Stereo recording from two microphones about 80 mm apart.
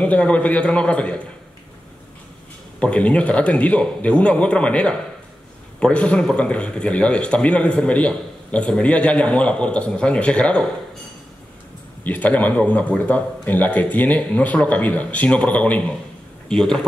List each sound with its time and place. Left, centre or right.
0.0 s a man's voice: centre
2.8 s a man's voice: centre
12.0 s a man's voice: left
16.4 s a man's voice: centre